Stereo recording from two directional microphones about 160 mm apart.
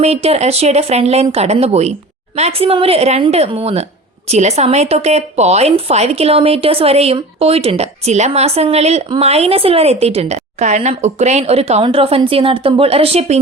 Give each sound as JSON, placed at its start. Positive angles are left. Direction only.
{"t": 0.0, "sound": "speech", "side_deg": -40}